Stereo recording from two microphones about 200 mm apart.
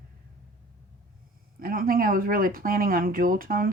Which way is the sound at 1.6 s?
45° right (ahead or behind).